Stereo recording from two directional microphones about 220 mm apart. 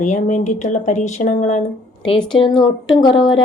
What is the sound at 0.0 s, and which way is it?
Speech, 35° left (ahead or behind).